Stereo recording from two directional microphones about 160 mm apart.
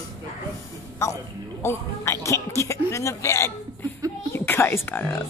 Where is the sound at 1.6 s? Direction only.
15° left (ahead or behind).